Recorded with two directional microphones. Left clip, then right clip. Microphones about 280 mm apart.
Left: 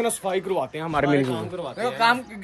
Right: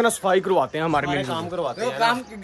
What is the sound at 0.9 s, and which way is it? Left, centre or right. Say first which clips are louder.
Speech: left 5 dB; centre.